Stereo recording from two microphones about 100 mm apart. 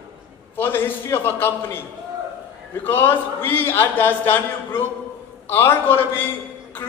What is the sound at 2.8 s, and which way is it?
Speech, 20° left (ahead or behind).